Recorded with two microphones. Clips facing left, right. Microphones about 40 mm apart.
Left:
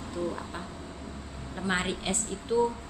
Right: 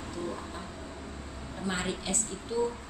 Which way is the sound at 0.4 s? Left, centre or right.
Left.